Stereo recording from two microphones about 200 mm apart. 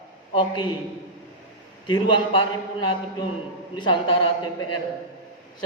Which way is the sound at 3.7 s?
25° left (ahead or behind).